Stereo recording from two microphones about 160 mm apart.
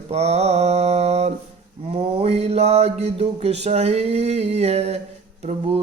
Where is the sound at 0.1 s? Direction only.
40° right (ahead or behind).